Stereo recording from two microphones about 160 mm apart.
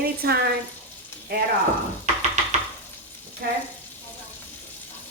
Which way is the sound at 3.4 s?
80° right.